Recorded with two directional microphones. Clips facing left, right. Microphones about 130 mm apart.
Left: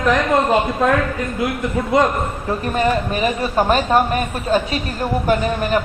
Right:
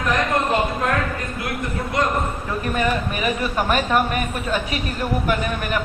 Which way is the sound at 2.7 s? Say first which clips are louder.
Left 5 dB; 30° left (ahead or behind).